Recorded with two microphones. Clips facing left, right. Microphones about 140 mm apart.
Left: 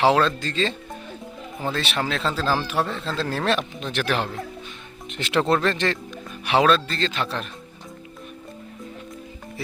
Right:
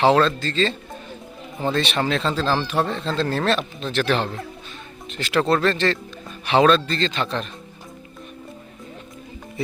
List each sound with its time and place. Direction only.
0.0 s speech: 10° left (ahead or behind)
5.0 s speech: 20° left (ahead or behind); by 7.4 s 5° left (ahead or behind)